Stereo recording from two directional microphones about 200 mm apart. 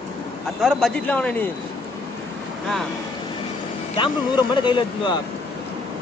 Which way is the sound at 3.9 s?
25° left (ahead or behind).